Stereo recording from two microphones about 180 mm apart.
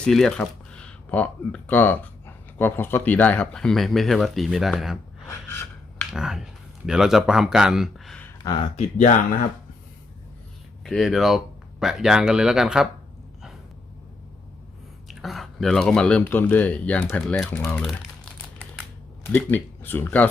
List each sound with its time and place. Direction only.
0.0 s speech: 5° left (ahead or behind)
6.1 s speech: 5° right (ahead or behind)
8.7 s speech: 45° left (ahead or behind)
10.8 s speech: centre (ahead or behind)
15.0 s speech: centre (ahead or behind)
19.3 s speech: 10° left (ahead or behind)